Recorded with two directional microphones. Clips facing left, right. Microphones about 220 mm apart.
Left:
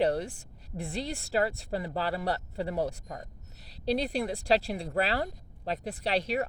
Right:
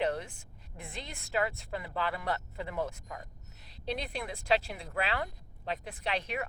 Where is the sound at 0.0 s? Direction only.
35° left (ahead or behind).